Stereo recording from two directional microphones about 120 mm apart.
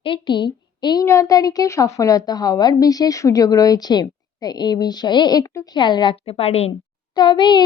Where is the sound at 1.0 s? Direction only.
25° left (ahead or behind); by 6.1 s 40° left (ahead or behind).